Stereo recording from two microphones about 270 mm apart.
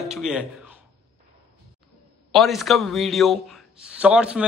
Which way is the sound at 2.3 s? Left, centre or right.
Centre.